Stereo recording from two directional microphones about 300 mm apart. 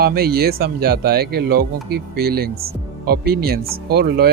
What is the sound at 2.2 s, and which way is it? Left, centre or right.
A man's voice, right.